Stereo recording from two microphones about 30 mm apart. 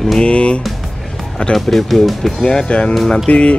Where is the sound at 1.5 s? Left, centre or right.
Centre.